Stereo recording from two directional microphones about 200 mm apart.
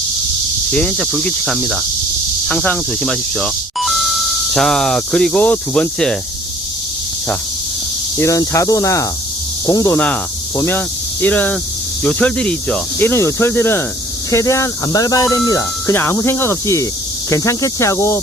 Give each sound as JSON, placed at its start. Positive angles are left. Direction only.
{"t": 0.7, "sound": "cricket", "side_deg": 5}
{"t": 2.5, "sound": "speech", "side_deg": 5}
{"t": 8.2, "sound": "speech", "side_deg": 15}